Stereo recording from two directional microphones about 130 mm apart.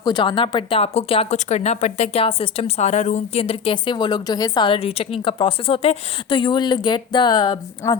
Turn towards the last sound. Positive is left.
turn(degrees=35)  # may be behind; listen again after turning